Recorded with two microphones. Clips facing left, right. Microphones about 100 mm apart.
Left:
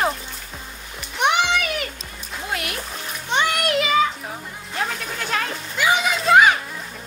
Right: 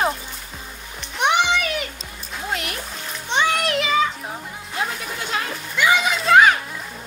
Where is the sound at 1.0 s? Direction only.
Centre (ahead or behind).